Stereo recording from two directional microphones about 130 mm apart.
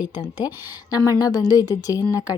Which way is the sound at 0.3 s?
30° left (ahead or behind).